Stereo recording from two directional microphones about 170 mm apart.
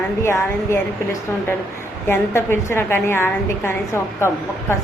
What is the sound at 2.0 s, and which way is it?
A woman's voice, 15° left (ahead or behind).